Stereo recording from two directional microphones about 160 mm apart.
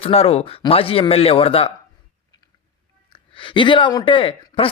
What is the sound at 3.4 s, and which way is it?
Speech, 30° left (ahead or behind).